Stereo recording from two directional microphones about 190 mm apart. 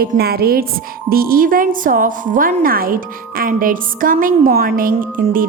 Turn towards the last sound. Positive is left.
turn(degrees=-50)  # may be behind; listen again after turning